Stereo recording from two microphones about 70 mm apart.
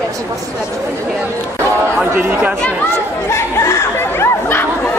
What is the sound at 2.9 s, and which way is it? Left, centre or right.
Speech, left.